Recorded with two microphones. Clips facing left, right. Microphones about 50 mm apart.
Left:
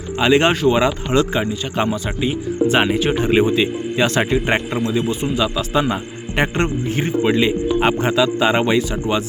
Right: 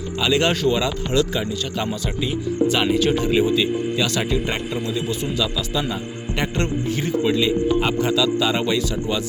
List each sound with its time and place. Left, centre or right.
0.2 s a man's voice: left
3.2 s a man's voice: left